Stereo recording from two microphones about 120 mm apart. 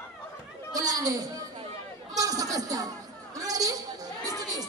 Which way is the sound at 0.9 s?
30° right (ahead or behind).